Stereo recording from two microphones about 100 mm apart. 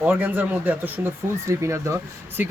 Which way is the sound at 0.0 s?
20° right (ahead or behind).